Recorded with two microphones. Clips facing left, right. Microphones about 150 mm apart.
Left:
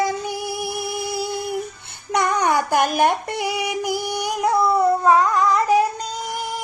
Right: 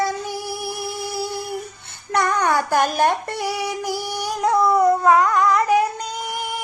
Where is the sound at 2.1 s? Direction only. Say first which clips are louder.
Even; 15° left (ahead or behind).